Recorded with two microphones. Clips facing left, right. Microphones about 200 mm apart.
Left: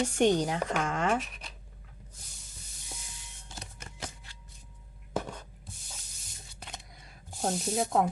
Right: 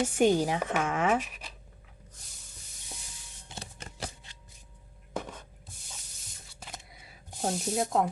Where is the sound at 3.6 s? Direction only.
35° right (ahead or behind).